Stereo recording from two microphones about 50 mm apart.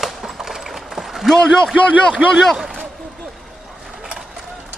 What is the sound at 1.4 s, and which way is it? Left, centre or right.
Speech, centre.